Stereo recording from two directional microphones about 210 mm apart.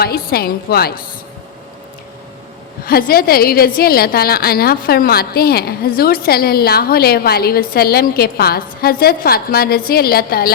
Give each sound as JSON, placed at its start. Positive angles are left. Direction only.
{"t": 0.0, "sound": "a woman's voice", "side_deg": 45}
{"t": 2.8, "sound": "a woman's voice", "side_deg": 45}